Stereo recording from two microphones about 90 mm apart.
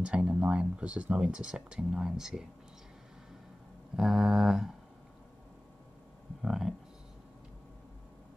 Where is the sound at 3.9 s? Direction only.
5° right (ahead or behind).